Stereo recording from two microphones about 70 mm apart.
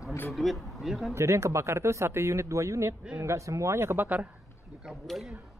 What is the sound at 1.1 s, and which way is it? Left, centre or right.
A man's voice, right.